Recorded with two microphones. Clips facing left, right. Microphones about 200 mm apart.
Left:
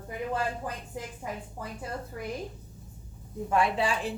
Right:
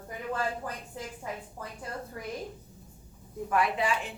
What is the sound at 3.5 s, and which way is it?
Speech, 30° left (ahead or behind).